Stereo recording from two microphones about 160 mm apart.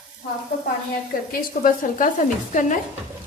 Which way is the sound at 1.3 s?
60° left (ahead or behind).